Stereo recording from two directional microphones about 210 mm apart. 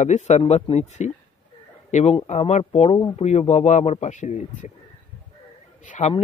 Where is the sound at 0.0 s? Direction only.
35° left (ahead or behind).